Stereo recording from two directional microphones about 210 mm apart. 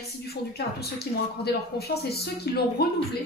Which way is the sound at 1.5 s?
50° left (ahead or behind).